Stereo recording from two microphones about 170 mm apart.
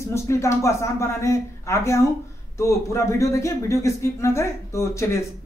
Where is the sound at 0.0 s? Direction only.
15° left (ahead or behind).